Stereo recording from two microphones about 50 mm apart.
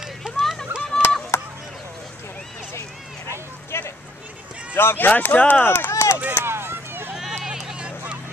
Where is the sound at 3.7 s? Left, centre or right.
Left.